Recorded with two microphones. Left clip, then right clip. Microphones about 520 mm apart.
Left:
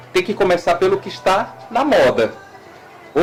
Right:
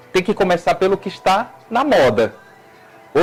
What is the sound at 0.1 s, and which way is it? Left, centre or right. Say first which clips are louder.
A man's voice: even; right.